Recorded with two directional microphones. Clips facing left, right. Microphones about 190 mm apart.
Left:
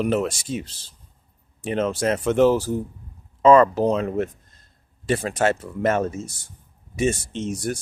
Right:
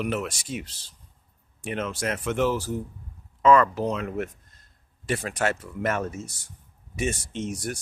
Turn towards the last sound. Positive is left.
turn(degrees=30)  # may be behind; listen again after turning